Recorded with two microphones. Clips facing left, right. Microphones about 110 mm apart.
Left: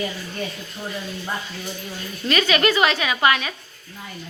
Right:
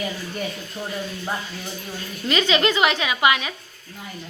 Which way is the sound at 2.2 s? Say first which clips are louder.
Left 1 dB; 20° right (ahead or behind).